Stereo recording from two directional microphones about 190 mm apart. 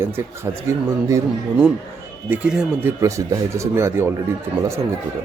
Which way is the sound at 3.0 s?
15° right (ahead or behind).